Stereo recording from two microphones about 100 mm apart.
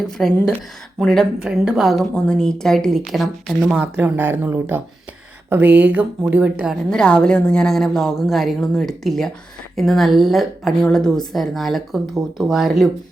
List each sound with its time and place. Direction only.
0.0 s a woman's voice: 5° left (ahead or behind)
1.4 s a woman's voice: 5° right (ahead or behind)
6.9 s a woman's voice: 10° left (ahead or behind)